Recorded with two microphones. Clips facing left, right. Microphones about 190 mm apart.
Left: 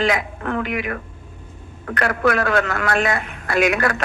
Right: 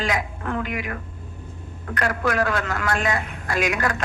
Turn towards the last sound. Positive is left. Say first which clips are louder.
# left 5 dB
turn(degrees=65)  # may be behind; listen again after turning